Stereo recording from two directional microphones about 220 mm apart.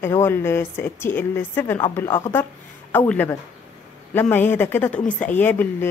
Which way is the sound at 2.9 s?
10° left (ahead or behind).